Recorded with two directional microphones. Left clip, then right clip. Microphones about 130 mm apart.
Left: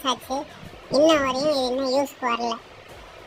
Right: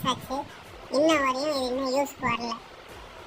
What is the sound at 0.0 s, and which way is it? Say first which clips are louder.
A child's voice: left 3 dB; 15° left (ahead or behind).